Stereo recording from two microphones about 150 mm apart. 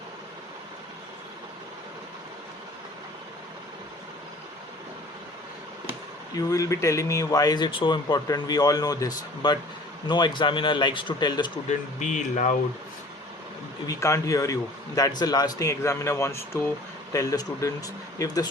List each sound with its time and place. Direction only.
6.3 s speech: 20° left (ahead or behind)
11.7 s speech: 55° left (ahead or behind)
13.8 s speech: 20° left (ahead or behind)